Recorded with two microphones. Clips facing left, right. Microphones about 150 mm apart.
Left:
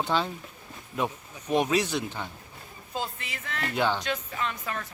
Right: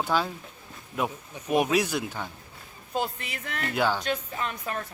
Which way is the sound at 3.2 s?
50° right (ahead or behind).